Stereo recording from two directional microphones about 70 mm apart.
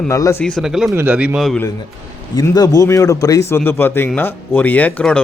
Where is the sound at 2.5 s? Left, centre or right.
Left.